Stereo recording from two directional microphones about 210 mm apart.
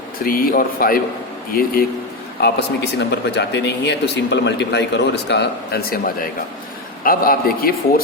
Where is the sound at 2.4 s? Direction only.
55° left (ahead or behind).